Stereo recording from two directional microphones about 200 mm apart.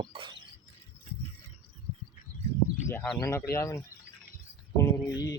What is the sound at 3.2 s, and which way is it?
Speech, 15° left (ahead or behind).